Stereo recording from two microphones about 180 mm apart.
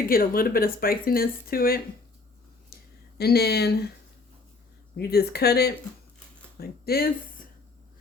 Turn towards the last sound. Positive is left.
turn(degrees=60)  # may be behind; listen again after turning